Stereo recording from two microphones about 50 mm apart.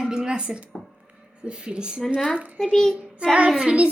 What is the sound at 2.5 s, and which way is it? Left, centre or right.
Speech, centre.